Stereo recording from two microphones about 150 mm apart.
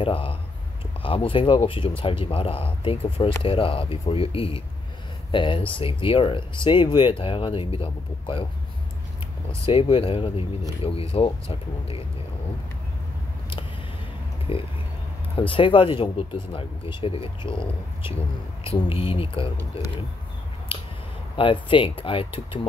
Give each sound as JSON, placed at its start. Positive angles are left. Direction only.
{"t": 0.0, "sound": "speech", "side_deg": 35}
{"t": 9.7, "sound": "speech", "side_deg": 40}
{"t": 14.5, "sound": "speech", "side_deg": 40}
{"t": 21.4, "sound": "speech", "side_deg": 35}